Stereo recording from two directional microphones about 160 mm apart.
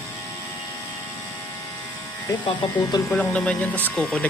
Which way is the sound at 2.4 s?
25° left (ahead or behind).